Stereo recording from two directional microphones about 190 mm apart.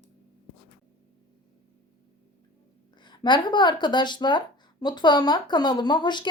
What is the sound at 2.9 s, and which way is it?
Speech, 25° left (ahead or behind).